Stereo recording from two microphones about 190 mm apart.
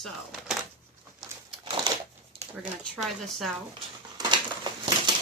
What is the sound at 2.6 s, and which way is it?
Speech, centre (ahead or behind).